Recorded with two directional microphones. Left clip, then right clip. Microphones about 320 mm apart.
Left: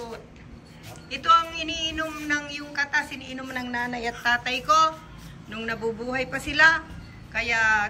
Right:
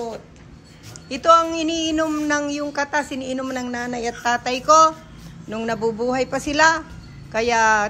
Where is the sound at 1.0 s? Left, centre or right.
Centre.